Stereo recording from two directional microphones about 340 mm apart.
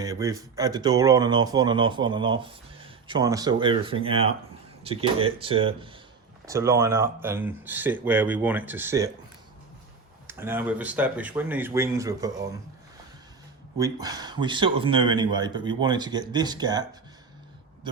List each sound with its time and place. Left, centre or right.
0.0 s speech: centre
10.2 s speech: centre
13.7 s speech: centre